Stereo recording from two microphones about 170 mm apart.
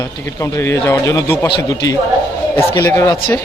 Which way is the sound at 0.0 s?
15° left (ahead or behind).